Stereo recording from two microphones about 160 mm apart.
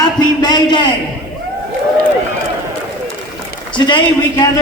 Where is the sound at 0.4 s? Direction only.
25° left (ahead or behind).